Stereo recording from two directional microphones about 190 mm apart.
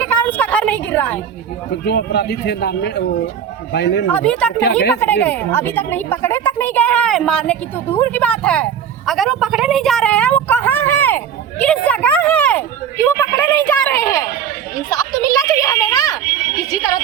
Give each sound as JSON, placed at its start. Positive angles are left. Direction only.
{"t": 0.0, "sound": "a sound", "side_deg": 5}
{"t": 1.7, "sound": "speech", "side_deg": 60}
{"t": 4.1, "sound": "speech", "side_deg": 5}
{"t": 4.5, "sound": "speech", "side_deg": 60}
{"t": 5.2, "sound": "speech", "side_deg": 10}
{"t": 13.7, "sound": "speech", "side_deg": 15}
{"t": 14.8, "sound": "children playing", "side_deg": 20}